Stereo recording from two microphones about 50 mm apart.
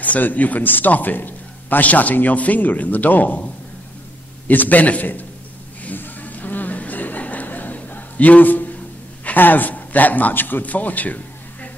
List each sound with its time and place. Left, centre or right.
0.0 s a man's voice: left
4.5 s a man's voice: left
5.9 s a sound: left
9.2 s a man's voice: left